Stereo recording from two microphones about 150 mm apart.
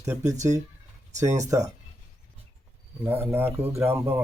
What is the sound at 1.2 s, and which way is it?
Speech, 20° right (ahead or behind).